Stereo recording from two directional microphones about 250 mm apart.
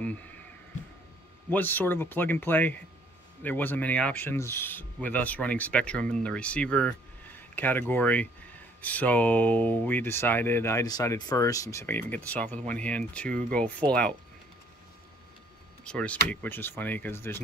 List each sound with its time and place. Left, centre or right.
1.5 s speech: centre
15.8 s speech: centre